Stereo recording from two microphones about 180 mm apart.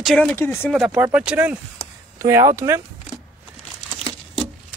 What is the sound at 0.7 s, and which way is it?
Speech, 5° right (ahead or behind).